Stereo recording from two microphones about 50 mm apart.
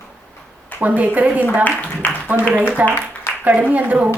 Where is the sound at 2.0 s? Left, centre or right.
Left.